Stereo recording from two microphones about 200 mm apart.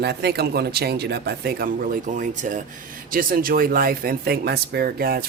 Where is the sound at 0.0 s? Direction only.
55° right (ahead or behind).